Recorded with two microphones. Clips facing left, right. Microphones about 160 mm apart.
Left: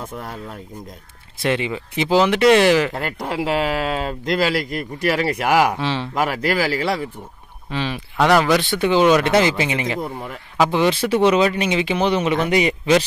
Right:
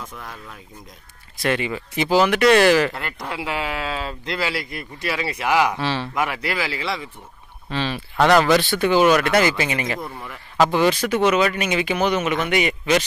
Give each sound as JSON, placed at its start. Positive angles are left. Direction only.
{"t": 0.0, "sound": "speech", "side_deg": 30}
{"t": 1.4, "sound": "speech", "side_deg": 20}
{"t": 2.9, "sound": "speech", "side_deg": 40}
{"t": 5.8, "sound": "speech", "side_deg": 20}
{"t": 6.2, "sound": "speech", "side_deg": 40}
{"t": 7.7, "sound": "speech", "side_deg": 15}
{"t": 8.6, "sound": "speech", "side_deg": 20}